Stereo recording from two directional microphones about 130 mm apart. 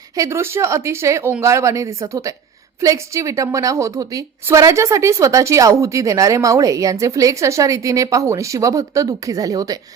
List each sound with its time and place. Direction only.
0.2 s a woman's voice: 20° right (ahead or behind)